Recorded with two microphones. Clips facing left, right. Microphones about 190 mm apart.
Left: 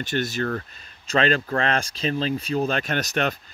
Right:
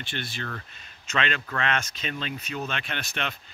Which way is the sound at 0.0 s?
45° left (ahead or behind).